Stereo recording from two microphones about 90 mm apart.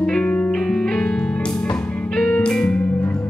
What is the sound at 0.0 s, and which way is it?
Music, 10° left (ahead or behind).